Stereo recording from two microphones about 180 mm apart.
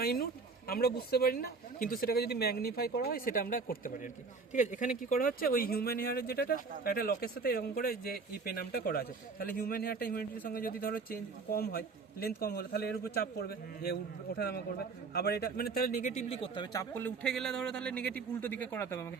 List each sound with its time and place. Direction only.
0.0 s speech: 60° left (ahead or behind)
16.3 s speech: 30° left (ahead or behind)
16.7 s a man's voice: 10° left (ahead or behind)